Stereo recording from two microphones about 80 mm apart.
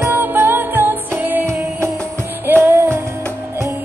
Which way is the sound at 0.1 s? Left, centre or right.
Right.